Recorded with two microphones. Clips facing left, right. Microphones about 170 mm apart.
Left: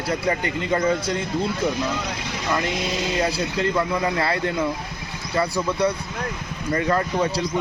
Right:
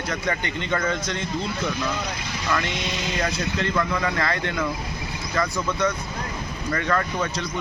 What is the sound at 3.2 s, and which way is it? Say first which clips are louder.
Speech: left 2 dB; 30° left (ahead or behind).